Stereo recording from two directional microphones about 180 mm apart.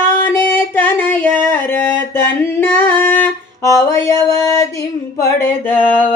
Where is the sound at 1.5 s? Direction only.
10° left (ahead or behind).